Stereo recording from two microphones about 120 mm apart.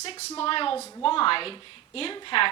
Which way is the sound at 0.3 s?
50° left (ahead or behind).